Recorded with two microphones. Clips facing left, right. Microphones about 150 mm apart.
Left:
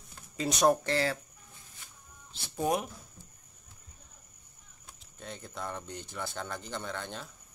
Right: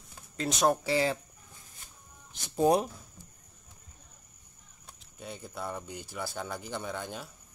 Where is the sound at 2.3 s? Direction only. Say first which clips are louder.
Right 5 dB; 15° right (ahead or behind).